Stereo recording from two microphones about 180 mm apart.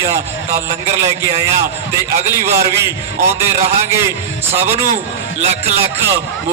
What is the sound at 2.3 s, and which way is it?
A man's voice, 15° right (ahead or behind).